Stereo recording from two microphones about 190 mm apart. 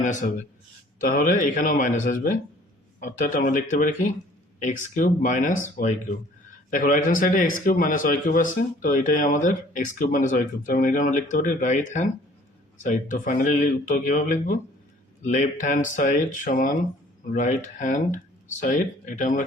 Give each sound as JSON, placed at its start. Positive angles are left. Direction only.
{"t": 0.0, "sound": "a man's voice", "side_deg": 40}